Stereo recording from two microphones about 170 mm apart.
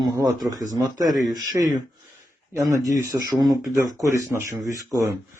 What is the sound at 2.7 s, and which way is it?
A man's voice, 15° right (ahead or behind).